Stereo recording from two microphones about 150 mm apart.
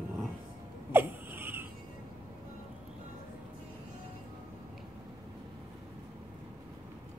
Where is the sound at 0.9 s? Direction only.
15° right (ahead or behind).